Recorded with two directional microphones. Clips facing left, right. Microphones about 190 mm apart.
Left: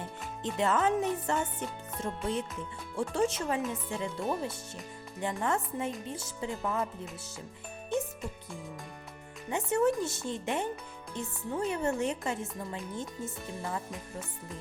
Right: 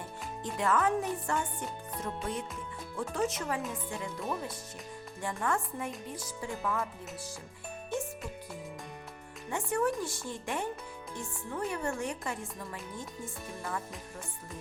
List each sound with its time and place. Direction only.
0.4 s speech: 25° left (ahead or behind)
9.5 s speech: 20° left (ahead or behind)